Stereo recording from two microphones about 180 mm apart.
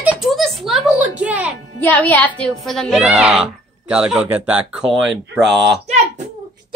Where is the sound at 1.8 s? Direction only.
10° left (ahead or behind).